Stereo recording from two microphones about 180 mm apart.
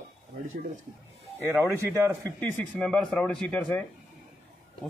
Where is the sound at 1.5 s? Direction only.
15° right (ahead or behind).